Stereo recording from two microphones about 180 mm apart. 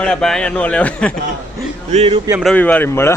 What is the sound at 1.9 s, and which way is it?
Speech, 35° right (ahead or behind).